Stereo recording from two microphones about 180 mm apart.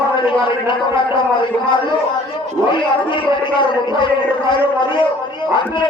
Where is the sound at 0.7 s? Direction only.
25° left (ahead or behind).